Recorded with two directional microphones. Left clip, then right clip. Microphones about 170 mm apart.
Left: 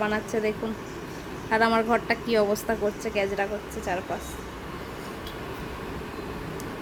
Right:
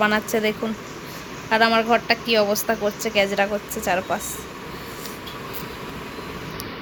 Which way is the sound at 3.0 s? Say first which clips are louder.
Right 6 dB; 10° right (ahead or behind).